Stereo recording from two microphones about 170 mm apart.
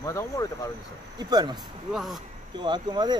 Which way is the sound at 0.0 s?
20° left (ahead or behind).